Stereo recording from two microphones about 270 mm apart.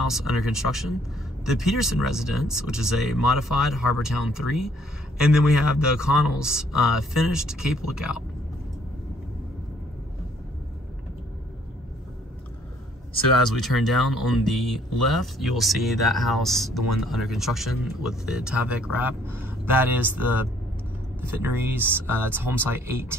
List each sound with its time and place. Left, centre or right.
0.0 s speech: centre
13.5 s speech: centre